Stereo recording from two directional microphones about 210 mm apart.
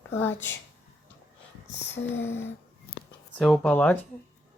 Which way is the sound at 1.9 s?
10° left (ahead or behind).